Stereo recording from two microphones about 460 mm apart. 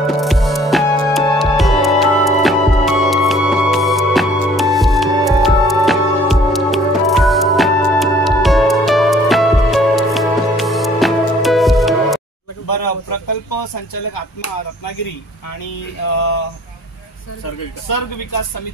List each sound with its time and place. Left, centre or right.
0.0 s music: centre
12.6 s a sound: left
17.8 s speech: left